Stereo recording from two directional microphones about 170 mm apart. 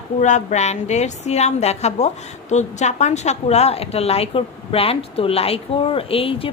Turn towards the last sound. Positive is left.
turn(degrees=35)  # may be behind; listen again after turning